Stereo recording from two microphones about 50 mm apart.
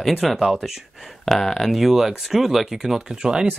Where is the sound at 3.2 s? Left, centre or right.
Centre.